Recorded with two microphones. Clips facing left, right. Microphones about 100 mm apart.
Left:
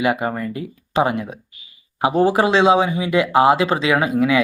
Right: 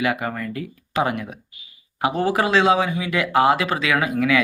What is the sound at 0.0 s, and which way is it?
Speech, 25° left (ahead or behind).